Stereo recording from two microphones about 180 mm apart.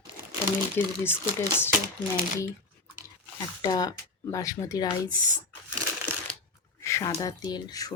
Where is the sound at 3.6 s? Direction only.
20° left (ahead or behind).